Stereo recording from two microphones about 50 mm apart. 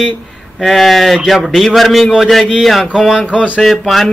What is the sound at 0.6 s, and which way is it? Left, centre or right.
A man's voice, centre.